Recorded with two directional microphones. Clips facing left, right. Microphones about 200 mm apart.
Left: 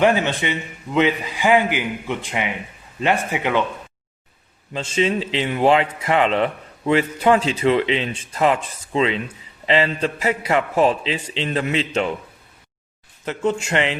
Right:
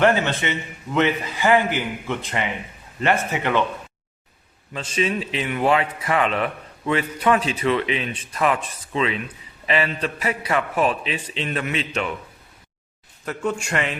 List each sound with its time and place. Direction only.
0.0 s a man's voice: 15° left (ahead or behind)
4.7 s a man's voice: 25° left (ahead or behind)
13.2 s a man's voice: 25° left (ahead or behind)